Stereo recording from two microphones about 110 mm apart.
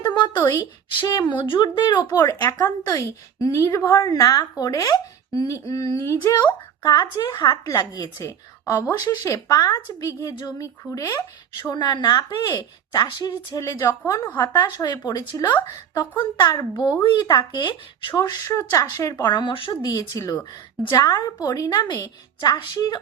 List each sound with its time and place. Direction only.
0.0 s speech: 40° left (ahead or behind)
14.1 s speech: 20° left (ahead or behind)
14.4 s speech: 35° left (ahead or behind)
18.4 s speech: 30° left (ahead or behind); by 19.8 s 50° left (ahead or behind)
19.8 s speech: 35° left (ahead or behind)